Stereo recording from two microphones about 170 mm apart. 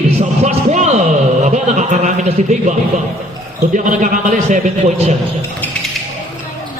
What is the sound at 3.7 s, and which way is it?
A man's voice, 50° right (ahead or behind).